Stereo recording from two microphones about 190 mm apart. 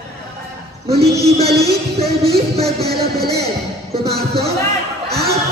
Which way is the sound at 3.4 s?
55° right (ahead or behind).